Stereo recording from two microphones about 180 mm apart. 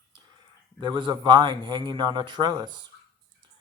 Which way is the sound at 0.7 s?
25° right (ahead or behind).